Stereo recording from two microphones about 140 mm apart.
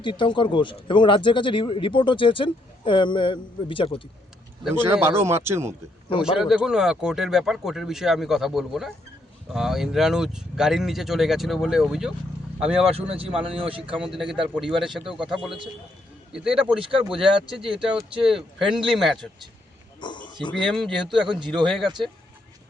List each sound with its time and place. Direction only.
0.0 s speech: 35° left (ahead or behind)
4.7 s speech: 15° right (ahead or behind)
6.1 s speech: 40° left (ahead or behind)
6.4 s speech: 5° right (ahead or behind)
13.0 s speech: 45° right (ahead or behind)
14.1 s speech: centre (ahead or behind)
16.6 s speech: 40° right (ahead or behind)
17.7 s speech: 5° right (ahead or behind)
20.0 s speech: 35° left (ahead or behind)
20.5 s speech: centre (ahead or behind)
21.2 s speech: 35° right (ahead or behind)
21.7 s speech: centre (ahead or behind)